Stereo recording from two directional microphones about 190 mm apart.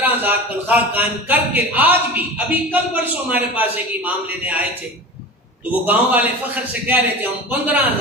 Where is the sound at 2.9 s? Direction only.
10° right (ahead or behind).